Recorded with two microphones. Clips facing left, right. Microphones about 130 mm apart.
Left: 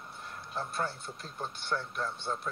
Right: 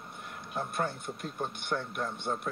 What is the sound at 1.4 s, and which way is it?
Speech, 15° right (ahead or behind).